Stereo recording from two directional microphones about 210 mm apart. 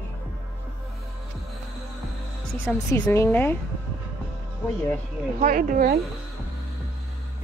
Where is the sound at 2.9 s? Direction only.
10° left (ahead or behind).